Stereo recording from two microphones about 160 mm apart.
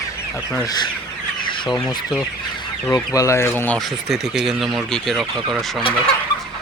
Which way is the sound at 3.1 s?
15° left (ahead or behind).